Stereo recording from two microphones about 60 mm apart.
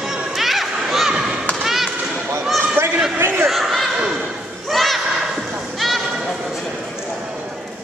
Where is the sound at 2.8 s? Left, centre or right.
Right.